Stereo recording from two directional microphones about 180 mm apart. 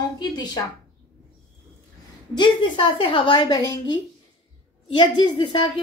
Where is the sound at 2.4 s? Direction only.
25° left (ahead or behind).